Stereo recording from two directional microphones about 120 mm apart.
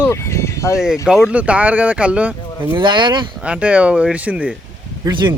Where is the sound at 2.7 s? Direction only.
40° right (ahead or behind).